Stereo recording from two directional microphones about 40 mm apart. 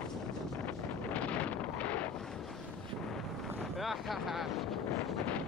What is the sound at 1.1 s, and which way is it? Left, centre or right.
Wind noise, left.